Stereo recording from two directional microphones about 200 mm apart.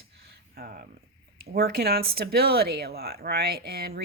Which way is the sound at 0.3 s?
50° right (ahead or behind).